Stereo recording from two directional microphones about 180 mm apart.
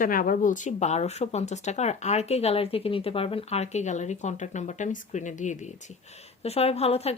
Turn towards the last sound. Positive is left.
turn(degrees=35)  # may be behind; listen again after turning